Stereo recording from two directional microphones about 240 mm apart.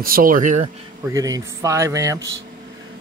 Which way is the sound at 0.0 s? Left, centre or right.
Right.